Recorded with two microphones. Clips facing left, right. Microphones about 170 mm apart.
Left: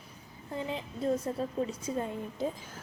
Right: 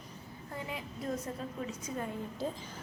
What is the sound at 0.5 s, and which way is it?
A woman's voice, 30° left (ahead or behind).